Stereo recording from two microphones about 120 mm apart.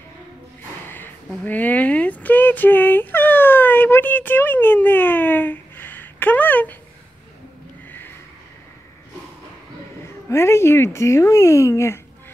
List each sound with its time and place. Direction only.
1.4 s speech: 15° left (ahead or behind)
10.3 s speech: 20° left (ahead or behind)